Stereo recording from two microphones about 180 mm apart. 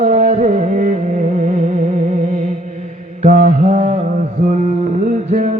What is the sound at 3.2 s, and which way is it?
Mantra, 50° right (ahead or behind).